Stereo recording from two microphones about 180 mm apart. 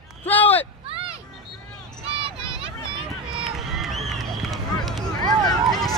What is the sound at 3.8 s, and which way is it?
Run, centre (ahead or behind).